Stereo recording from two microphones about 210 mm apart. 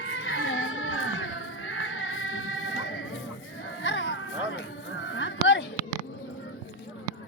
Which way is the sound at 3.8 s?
60° left (ahead or behind).